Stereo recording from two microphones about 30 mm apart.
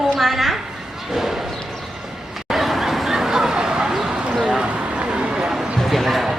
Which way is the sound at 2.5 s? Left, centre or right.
Centre.